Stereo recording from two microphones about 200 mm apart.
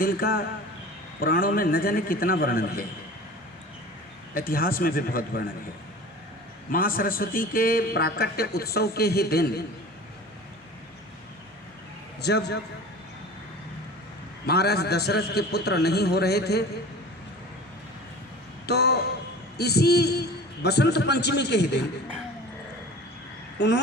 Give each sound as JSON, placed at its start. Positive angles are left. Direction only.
{"t": 0.0, "sound": "a man's voice", "side_deg": 50}
{"t": 4.4, "sound": "a man's voice", "side_deg": 45}
{"t": 6.7, "sound": "a man's voice", "side_deg": 45}
{"t": 12.2, "sound": "a man's voice", "side_deg": 55}
{"t": 14.4, "sound": "a man's voice", "side_deg": 55}
{"t": 18.6, "sound": "a sound", "side_deg": 55}
{"t": 19.5, "sound": "a man's voice", "side_deg": 55}
{"t": 23.6, "sound": "a man's voice", "side_deg": 60}